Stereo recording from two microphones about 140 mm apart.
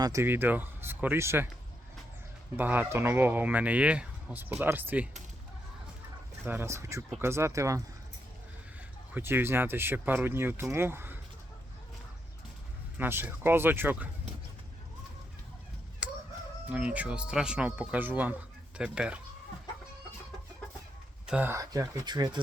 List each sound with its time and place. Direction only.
0.0 s speech: 20° right (ahead or behind)
2.6 s speech: 15° right (ahead or behind)
6.4 s speech: 20° right (ahead or behind)
9.1 s speech: 15° right (ahead or behind)
13.0 s speech: 15° right (ahead or behind)
16.0 s crowing: 10° right (ahead or behind)
16.6 s speech: 10° right (ahead or behind)
21.2 s speech: 10° right (ahead or behind)
21.5 s speech: 25° right (ahead or behind)